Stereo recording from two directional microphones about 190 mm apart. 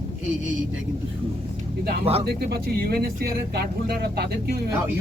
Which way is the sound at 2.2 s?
55° right (ahead or behind).